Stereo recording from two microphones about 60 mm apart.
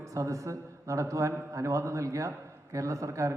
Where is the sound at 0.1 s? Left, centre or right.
Right.